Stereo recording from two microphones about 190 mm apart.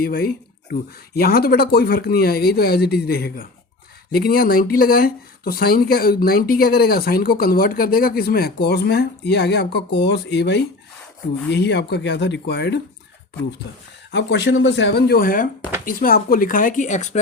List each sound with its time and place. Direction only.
0.0 s speech: 50° left (ahead or behind)
14.1 s speech: 65° left (ahead or behind); by 17.2 s 40° left (ahead or behind)